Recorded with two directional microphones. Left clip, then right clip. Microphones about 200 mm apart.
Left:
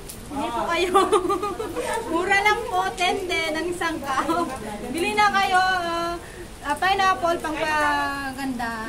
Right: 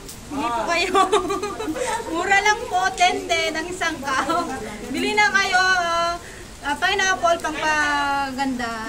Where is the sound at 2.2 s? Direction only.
15° left (ahead or behind).